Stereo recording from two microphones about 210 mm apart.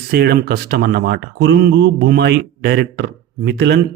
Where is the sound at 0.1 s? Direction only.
50° right (ahead or behind).